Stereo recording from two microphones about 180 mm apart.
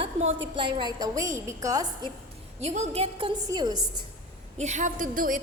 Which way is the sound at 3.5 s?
20° right (ahead or behind).